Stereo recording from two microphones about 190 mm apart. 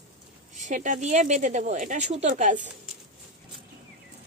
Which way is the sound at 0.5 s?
40° right (ahead or behind).